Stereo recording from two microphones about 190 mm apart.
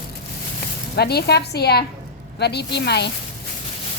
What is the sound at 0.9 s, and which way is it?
A woman's voice, 60° left (ahead or behind).